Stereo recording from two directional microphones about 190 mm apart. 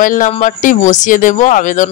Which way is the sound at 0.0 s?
45° left (ahead or behind).